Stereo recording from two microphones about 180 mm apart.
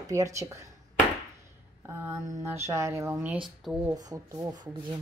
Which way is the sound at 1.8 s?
15° right (ahead or behind).